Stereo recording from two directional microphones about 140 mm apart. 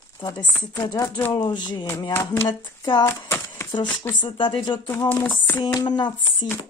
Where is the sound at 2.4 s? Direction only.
30° left (ahead or behind).